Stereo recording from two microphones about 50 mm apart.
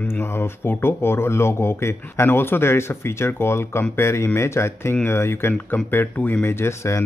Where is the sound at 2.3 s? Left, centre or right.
Left.